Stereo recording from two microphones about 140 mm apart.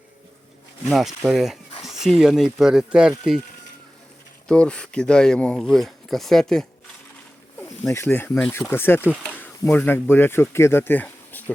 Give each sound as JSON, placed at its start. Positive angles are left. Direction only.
{"t": 0.9, "sound": "speech", "side_deg": 0}
{"t": 4.4, "sound": "speech", "side_deg": 5}
{"t": 7.6, "sound": "speech", "side_deg": 20}
{"t": 8.3, "sound": "speech", "side_deg": 5}
{"t": 8.5, "sound": "speech", "side_deg": 15}